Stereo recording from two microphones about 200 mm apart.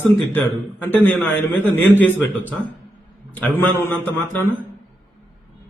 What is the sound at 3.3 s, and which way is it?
Speech, 10° left (ahead or behind).